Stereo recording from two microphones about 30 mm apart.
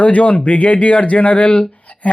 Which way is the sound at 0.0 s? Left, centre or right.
Left.